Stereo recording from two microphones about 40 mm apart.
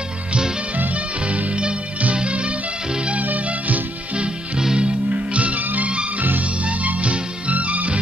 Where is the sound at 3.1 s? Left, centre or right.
Right.